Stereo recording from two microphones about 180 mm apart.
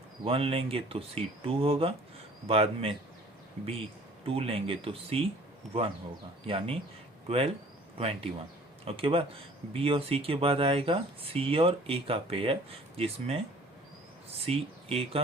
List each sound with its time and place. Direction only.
0.3 s speech: 30° right (ahead or behind)
4.3 s speech: 30° right (ahead or behind)
6.4 s speech: 30° right (ahead or behind)
14.4 s speech: 35° right (ahead or behind)